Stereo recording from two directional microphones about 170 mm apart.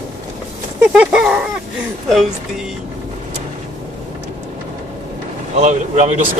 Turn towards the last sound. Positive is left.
turn(degrees=-45)  # may be behind; listen again after turning